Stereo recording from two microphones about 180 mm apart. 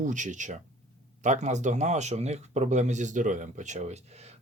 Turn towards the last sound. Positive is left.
turn(degrees=-35)  # may be behind; listen again after turning